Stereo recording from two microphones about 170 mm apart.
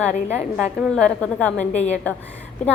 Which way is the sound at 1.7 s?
40° left (ahead or behind).